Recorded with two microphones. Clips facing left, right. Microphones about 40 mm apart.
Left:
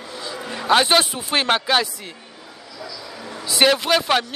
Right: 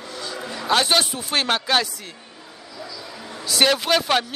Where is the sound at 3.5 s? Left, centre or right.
Centre.